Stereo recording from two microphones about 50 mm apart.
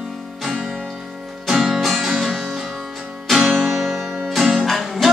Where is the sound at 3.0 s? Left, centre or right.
Centre.